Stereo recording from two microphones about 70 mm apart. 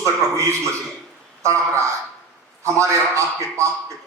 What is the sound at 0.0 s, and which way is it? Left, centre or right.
A man's voice, right.